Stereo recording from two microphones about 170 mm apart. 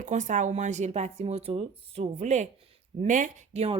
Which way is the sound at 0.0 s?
45° right (ahead or behind).